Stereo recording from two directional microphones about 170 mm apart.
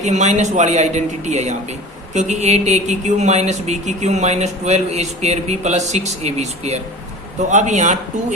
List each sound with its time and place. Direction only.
0.0 s speech: 45° right (ahead or behind)